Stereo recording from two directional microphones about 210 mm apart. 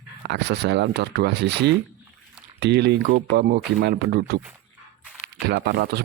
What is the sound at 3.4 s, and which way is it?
Speech, 50° right (ahead or behind).